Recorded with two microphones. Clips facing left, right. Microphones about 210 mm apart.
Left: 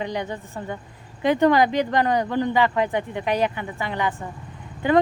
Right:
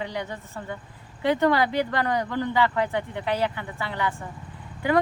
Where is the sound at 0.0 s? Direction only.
15° left (ahead or behind).